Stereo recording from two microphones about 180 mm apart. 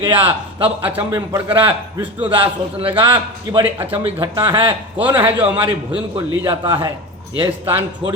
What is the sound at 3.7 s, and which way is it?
Speech, 10° right (ahead or behind).